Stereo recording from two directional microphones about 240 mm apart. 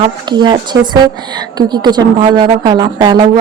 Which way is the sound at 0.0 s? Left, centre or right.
Centre.